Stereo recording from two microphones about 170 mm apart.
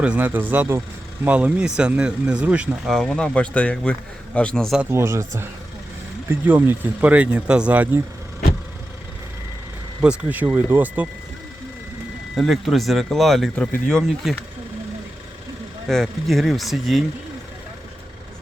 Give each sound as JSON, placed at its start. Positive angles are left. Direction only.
{"t": 0.0, "sound": "speech", "side_deg": -10}
{"t": 4.8, "sound": "speech", "side_deg": -15}
{"t": 6.5, "sound": "speech", "side_deg": -10}
{"t": 10.0, "sound": "speech", "side_deg": -5}
{"t": 12.4, "sound": "speech", "side_deg": 0}
{"t": 15.9, "sound": "speech", "side_deg": 0}